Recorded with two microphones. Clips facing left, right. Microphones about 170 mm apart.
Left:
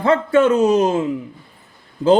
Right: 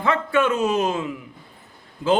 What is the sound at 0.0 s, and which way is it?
Speech, 40° left (ahead or behind).